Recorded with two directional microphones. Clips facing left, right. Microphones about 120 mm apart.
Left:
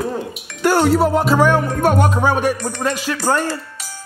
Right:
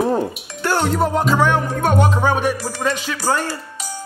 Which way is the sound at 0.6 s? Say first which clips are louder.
Left 4 dB; 10° left (ahead or behind).